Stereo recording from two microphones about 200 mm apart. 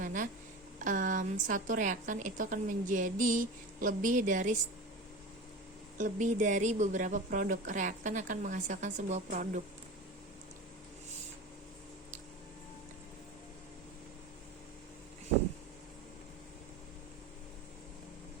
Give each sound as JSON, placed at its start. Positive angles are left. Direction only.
{"t": 0.0, "sound": "a sound", "side_deg": -40}
{"t": 0.8, "sound": "a woman's voice", "side_deg": -40}
{"t": 6.0, "sound": "a woman's voice", "side_deg": -40}